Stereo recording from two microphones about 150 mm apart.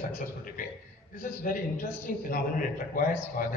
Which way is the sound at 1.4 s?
70° left (ahead or behind).